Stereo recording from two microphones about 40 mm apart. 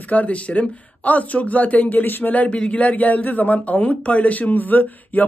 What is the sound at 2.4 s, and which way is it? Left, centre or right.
Speech, left.